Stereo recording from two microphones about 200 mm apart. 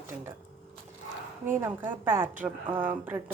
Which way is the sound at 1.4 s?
10° right (ahead or behind).